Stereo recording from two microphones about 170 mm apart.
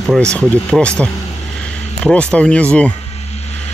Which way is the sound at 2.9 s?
40° left (ahead or behind).